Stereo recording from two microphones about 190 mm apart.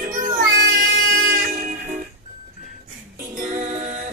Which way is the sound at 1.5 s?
40° right (ahead or behind).